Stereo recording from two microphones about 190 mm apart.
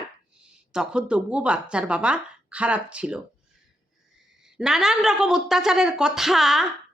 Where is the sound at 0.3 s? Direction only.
5° right (ahead or behind).